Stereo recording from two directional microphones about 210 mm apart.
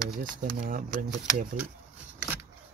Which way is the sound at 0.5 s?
40° right (ahead or behind).